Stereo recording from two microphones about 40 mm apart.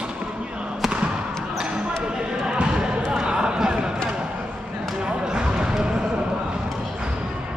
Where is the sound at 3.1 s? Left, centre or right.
Right.